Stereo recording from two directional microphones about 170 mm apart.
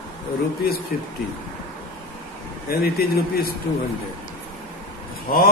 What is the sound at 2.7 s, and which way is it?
Speech, 65° left (ahead or behind).